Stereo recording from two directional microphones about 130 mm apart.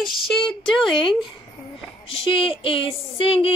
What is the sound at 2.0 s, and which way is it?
Speech, 45° left (ahead or behind).